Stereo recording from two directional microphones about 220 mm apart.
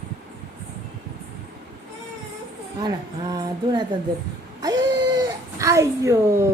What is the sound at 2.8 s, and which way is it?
Speech, 20° right (ahead or behind).